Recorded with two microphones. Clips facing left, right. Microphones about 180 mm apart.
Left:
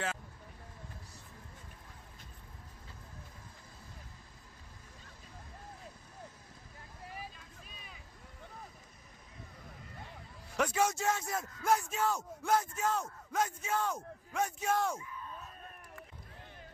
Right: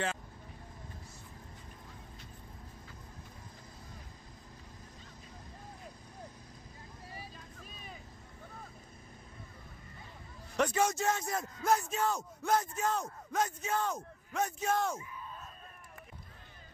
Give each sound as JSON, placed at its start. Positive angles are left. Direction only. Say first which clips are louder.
{"t": 7.3, "sound": "vehicle", "louder": "right 4 dB", "side_deg": -40}
{"t": 10.5, "sound": "speech", "louder": "right 1 dB", "side_deg": 5}